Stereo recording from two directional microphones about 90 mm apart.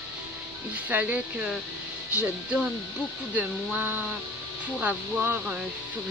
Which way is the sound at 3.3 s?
20° right (ahead or behind).